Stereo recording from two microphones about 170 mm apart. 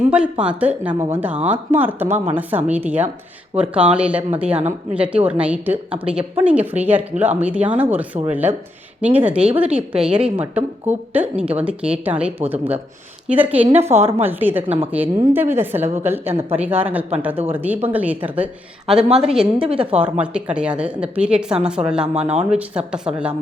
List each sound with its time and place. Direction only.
0.1 s a woman's voice: 5° right (ahead or behind)
2.0 s a woman's voice: 40° right (ahead or behind)
2.3 s a woman's voice: 10° right (ahead or behind)
13.7 s a woman's voice: 40° right (ahead or behind)
14.3 s a woman's voice: 10° right (ahead or behind)
16.3 s a woman's voice: 35° right (ahead or behind)
16.6 s a woman's voice: 10° right (ahead or behind)
19.6 s a woman's voice: 30° right (ahead or behind)
20.0 s a woman's voice: 10° right (ahead or behind)
22.1 s a woman's voice: 35° right (ahead or behind)
22.4 s a woman's voice: 5° right (ahead or behind)